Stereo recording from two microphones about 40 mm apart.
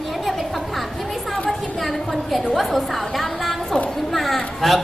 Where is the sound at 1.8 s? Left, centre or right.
Centre.